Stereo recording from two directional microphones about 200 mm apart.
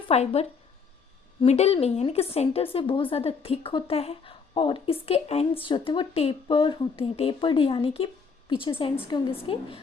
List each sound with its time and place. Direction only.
0.1 s speech: 30° left (ahead or behind)